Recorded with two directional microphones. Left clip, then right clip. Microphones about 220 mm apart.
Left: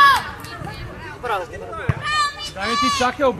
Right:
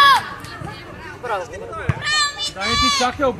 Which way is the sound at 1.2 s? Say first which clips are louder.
Left 1 dB; 45° left (ahead or behind).